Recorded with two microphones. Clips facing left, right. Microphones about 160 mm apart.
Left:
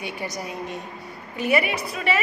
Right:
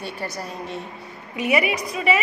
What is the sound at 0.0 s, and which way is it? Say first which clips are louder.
Speech: even; 15° left (ahead or behind).